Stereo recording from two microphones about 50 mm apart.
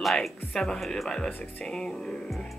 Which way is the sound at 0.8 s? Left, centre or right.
Centre.